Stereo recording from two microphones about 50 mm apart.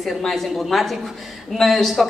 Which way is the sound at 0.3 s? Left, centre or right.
Centre.